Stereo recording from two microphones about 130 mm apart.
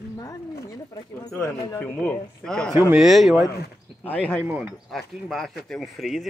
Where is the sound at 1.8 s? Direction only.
15° left (ahead or behind); by 3.5 s centre (ahead or behind).